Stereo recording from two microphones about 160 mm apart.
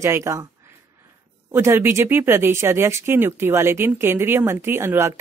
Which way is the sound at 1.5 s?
15° right (ahead or behind).